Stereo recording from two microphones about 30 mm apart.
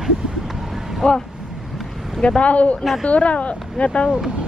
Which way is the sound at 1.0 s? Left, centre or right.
Left.